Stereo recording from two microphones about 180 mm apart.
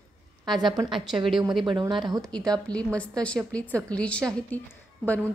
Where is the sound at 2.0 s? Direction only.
20° right (ahead or behind).